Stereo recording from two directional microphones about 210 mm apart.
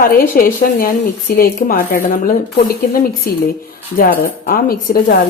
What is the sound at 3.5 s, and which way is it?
A woman's voice, 40° left (ahead or behind).